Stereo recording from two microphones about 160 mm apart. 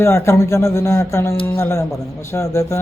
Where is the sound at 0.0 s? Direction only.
15° left (ahead or behind).